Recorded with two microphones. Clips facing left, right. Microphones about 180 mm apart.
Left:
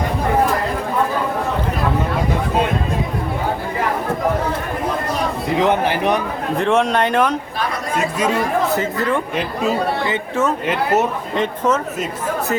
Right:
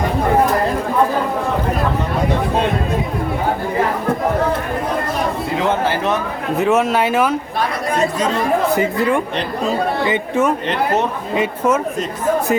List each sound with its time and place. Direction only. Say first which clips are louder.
5.5 s speech: left 2 dB; 20° left (ahead or behind)
6.6 s speech: right 1 dB; 5° right (ahead or behind)
8.7 s speech: right 3 dB; 15° right (ahead or behind)